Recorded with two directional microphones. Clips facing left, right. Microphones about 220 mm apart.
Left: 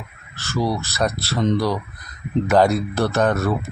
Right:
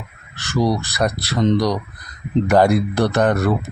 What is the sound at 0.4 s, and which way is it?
Speech, 15° right (ahead or behind).